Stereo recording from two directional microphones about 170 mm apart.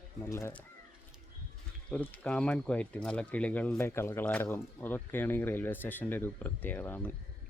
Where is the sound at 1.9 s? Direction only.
10° left (ahead or behind).